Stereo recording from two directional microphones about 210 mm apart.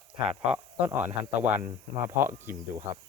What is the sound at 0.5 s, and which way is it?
Speech, 10° right (ahead or behind).